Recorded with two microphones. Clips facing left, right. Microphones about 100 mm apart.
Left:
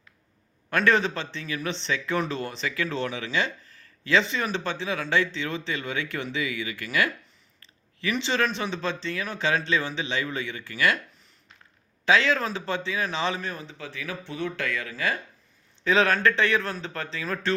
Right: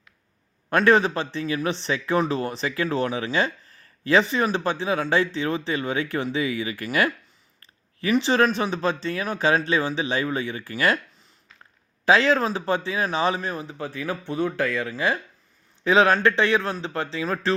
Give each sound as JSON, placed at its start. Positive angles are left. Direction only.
{"t": 0.7, "sound": "speech", "side_deg": -35}
{"t": 12.0, "sound": "speech", "side_deg": -35}